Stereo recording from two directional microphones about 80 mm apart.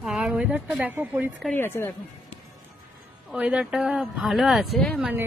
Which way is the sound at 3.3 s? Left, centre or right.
Centre.